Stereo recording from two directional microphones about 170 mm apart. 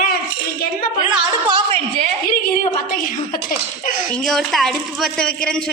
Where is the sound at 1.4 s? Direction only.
35° right (ahead or behind).